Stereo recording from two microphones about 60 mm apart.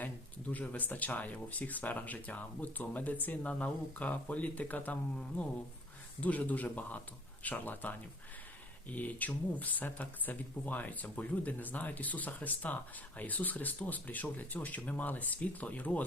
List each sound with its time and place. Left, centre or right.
0.0 s speech: left